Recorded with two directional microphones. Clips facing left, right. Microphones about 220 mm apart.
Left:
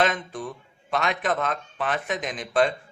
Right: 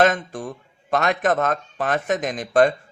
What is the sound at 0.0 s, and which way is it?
Speech, 45° right (ahead or behind).